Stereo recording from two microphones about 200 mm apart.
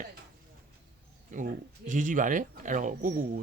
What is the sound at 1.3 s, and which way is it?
A man's voice, 40° right (ahead or behind).